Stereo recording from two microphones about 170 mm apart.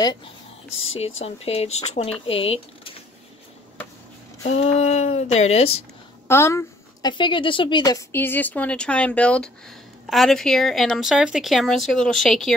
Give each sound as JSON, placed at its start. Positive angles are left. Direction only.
{"t": 0.0, "sound": "speech", "side_deg": 25}
{"t": 0.9, "sound": "speech", "side_deg": 35}
{"t": 4.5, "sound": "speech", "side_deg": 40}
{"t": 6.2, "sound": "a woman's voice", "side_deg": 15}